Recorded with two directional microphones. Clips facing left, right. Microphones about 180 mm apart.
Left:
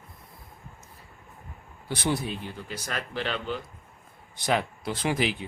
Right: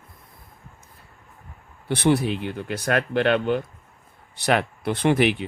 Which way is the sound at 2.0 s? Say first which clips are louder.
Right 9 dB; 65° right (ahead or behind).